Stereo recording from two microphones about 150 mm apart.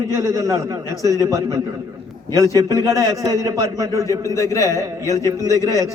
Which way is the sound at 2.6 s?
25° right (ahead or behind).